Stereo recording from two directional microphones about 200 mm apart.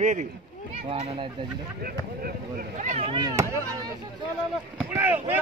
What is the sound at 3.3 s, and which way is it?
Speech, 15° right (ahead or behind).